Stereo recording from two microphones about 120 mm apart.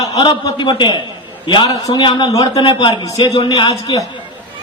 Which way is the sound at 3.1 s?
30° left (ahead or behind).